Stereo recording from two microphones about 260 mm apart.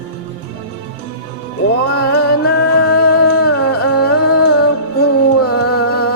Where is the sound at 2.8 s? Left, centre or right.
Left.